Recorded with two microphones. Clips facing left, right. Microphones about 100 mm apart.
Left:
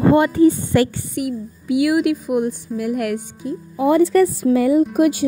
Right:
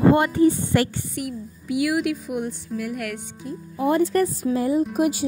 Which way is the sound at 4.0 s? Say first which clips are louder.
Left 6 dB; 85° left.